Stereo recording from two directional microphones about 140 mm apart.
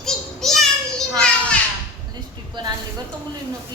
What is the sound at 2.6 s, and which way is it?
Speech, 35° right (ahead or behind).